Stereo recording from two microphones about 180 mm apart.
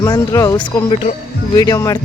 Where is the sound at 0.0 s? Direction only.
20° left (ahead or behind).